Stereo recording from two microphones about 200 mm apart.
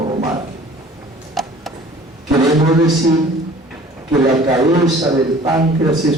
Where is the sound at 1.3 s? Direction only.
Centre (ahead or behind).